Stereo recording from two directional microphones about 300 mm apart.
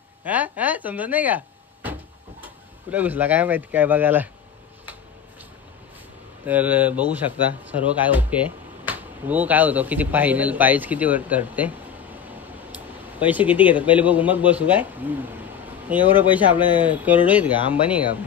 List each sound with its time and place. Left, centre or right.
0.2 s speech: centre
6.4 s speech: centre
16.5 s speech: centre
16.8 s speech: centre